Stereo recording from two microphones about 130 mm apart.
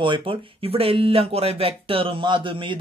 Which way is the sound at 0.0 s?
40° right (ahead or behind).